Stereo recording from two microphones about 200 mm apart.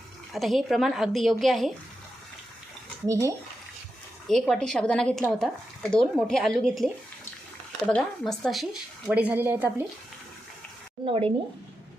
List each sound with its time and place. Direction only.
0.3 s speech: centre (ahead or behind)
3.1 s speech: 15° right (ahead or behind)
4.3 s speech: centre (ahead or behind)
11.0 s speech: 30° right (ahead or behind)